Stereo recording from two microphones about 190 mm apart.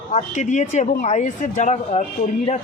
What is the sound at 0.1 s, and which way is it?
Speech, 40° left (ahead or behind).